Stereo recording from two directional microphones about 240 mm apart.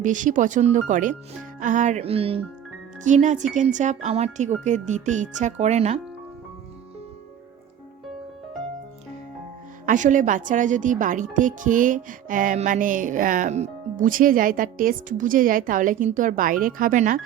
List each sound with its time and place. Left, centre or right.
0.0 s a woman's voice: right
9.8 s a woman's voice: right